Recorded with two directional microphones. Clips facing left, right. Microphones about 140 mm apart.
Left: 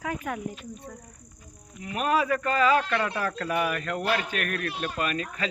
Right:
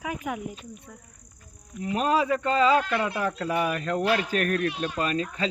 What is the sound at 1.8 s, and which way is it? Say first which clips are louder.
Speech: right 2 dB; 25° right (ahead or behind).